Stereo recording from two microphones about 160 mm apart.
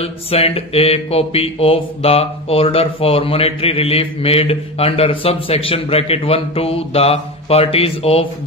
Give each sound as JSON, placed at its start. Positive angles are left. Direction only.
{"t": 0.0, "sound": "speech", "side_deg": 40}